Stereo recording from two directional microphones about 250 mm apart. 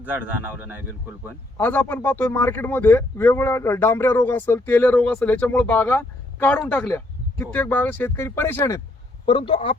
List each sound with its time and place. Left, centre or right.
0.0 s a man's voice: centre
1.5 s speech: centre